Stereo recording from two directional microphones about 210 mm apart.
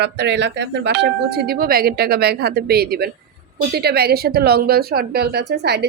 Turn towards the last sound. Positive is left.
turn(degrees=-50)  # may be behind; listen again after turning